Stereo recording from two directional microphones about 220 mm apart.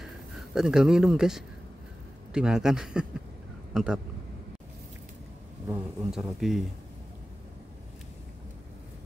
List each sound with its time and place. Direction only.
0.0 s speech: centre (ahead or behind)
5.7 s speech: centre (ahead or behind)